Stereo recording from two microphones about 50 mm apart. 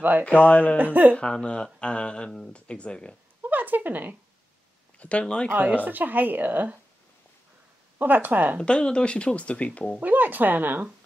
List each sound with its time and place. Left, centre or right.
0.2 s speech: left
0.7 s speech: right
1.1 s speech: centre
3.4 s speech: right
4.9 s speech: left
5.5 s speech: right
8.0 s speech: right
8.6 s speech: centre
9.9 s speech: right